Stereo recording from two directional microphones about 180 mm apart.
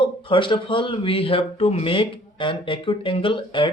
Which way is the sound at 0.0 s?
30° left (ahead or behind).